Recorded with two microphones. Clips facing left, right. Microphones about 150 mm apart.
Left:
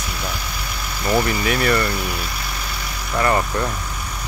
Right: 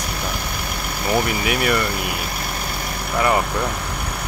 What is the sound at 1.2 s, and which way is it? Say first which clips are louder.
Speech: left 1 dB; 10° right (ahead or behind).